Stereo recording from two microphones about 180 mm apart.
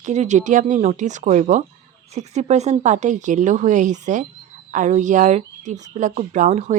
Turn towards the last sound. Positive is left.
turn(degrees=-40)  # may be behind; listen again after turning